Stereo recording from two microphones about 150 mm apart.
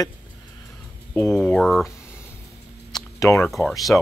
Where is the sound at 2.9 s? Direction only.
20° left (ahead or behind).